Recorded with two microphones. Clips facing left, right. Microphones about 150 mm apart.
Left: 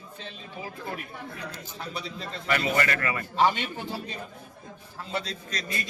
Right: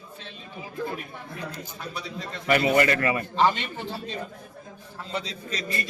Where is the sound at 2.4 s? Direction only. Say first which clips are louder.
Right 6 dB; 15° right (ahead or behind).